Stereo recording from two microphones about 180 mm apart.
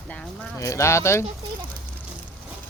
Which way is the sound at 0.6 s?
15° left (ahead or behind).